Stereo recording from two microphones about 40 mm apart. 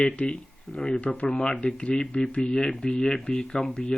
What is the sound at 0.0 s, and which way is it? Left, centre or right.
Speech, left.